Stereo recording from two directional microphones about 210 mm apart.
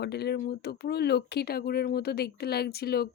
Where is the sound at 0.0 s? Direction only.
50° left (ahead or behind).